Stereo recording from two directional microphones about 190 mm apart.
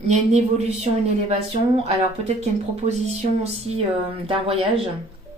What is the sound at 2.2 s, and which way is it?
Speech, 35° right (ahead or behind).